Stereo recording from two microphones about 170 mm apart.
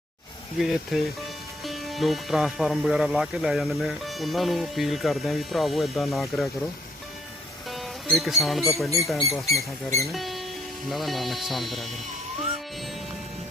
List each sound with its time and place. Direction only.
0.6 s speech: centre (ahead or behind)
7.7 s speech: centre (ahead or behind)
9.5 s speech: 20° left (ahead or behind)
10.1 s music: centre (ahead or behind)
10.8 s speech: centre (ahead or behind)